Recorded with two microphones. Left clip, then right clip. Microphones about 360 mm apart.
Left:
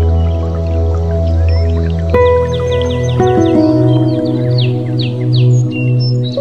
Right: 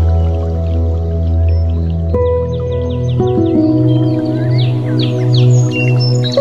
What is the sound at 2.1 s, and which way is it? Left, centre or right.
Music, left.